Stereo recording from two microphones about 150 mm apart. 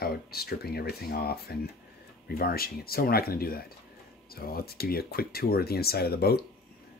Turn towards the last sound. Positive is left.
turn(degrees=90)